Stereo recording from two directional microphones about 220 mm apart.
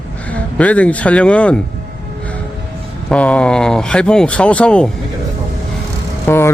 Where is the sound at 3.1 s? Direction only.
5° left (ahead or behind).